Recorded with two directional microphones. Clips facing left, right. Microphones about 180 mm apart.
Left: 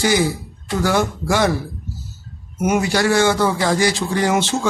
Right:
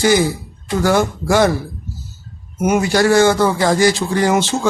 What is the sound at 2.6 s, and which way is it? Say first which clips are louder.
Speech: right 3 dB; 45° right (ahead or behind).